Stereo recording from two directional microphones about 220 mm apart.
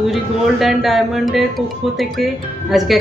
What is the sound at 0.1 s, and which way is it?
Speech, centre (ahead or behind).